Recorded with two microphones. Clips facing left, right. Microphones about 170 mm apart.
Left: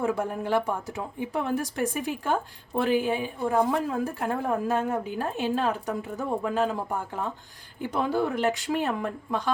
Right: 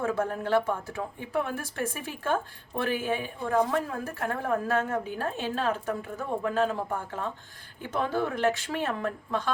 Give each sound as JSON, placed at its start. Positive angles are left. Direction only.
{"t": 0.0, "sound": "a woman's voice", "side_deg": 15}
{"t": 7.8, "sound": "a woman's voice", "side_deg": 15}